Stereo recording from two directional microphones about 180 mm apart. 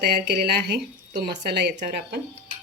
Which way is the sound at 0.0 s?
60° right (ahead or behind).